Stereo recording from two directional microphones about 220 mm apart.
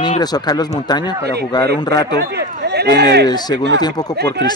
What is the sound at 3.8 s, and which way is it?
Speech, 20° left (ahead or behind).